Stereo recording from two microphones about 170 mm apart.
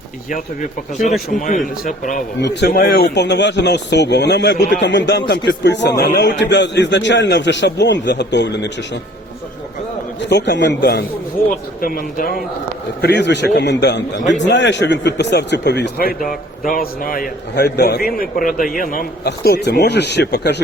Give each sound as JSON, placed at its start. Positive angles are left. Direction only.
{"t": 0.3, "sound": "speech", "side_deg": 50}
{"t": 2.4, "sound": "a man's voice", "side_deg": 80}
{"t": 10.2, "sound": "a man's voice", "side_deg": 90}
{"t": 11.8, "sound": "a man's voice", "side_deg": 55}
{"t": 13.0, "sound": "a man's voice", "side_deg": 85}
{"t": 19.5, "sound": "speech", "side_deg": 75}